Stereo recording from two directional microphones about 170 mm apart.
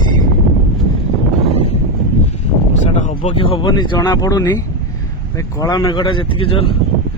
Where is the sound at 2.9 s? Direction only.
40° left (ahead or behind).